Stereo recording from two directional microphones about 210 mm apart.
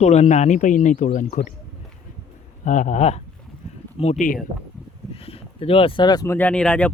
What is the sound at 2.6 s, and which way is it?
Speech, 35° left (ahead or behind).